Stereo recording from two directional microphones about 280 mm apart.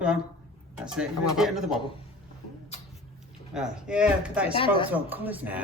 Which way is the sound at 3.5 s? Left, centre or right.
Centre.